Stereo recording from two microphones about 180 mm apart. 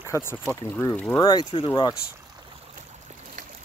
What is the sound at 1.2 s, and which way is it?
Speech, 25° left (ahead or behind).